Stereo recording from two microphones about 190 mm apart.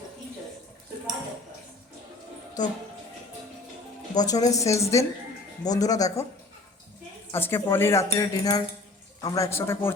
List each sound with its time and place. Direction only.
2.6 s speech: 20° left (ahead or behind)
4.1 s speech: 20° left (ahead or behind)
7.3 s speech: 10° left (ahead or behind)